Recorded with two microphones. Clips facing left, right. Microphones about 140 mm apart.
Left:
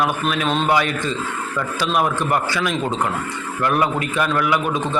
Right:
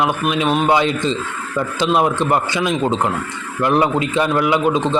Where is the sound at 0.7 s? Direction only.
25° right (ahead or behind).